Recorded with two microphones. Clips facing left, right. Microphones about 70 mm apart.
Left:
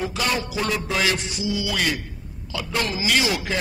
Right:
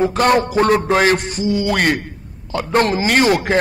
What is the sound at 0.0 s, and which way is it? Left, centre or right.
A man's voice, right.